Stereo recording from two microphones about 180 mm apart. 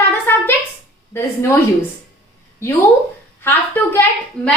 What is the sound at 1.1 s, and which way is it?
Speech, 15° left (ahead or behind).